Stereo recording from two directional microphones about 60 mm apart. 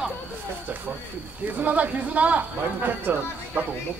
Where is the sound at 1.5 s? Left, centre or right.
Right.